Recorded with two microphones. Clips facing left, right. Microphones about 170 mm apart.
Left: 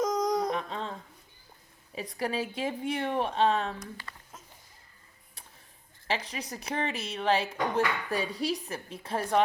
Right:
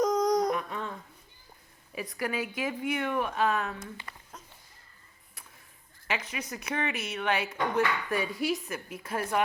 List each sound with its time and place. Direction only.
0.0 s a sound: centre (ahead or behind)
0.5 s humming: 25° left (ahead or behind)
2.0 s speech: 30° left (ahead or behind)
3.8 s speech: 20° right (ahead or behind)
6.1 s speech: 30° left (ahead or behind)